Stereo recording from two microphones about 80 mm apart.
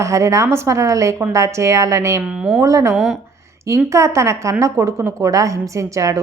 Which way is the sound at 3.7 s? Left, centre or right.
Right.